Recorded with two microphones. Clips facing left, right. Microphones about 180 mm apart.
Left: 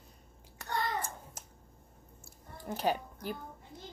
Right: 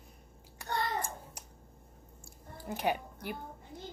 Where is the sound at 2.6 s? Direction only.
35° left (ahead or behind).